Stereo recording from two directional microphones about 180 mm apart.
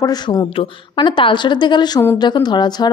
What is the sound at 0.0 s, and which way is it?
A woman's voice, 20° left (ahead or behind).